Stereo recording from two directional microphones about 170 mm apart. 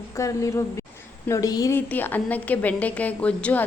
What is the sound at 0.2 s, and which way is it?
A woman's voice, 20° left (ahead or behind).